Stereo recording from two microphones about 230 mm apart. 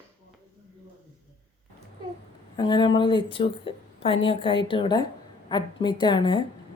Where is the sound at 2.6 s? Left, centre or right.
Centre.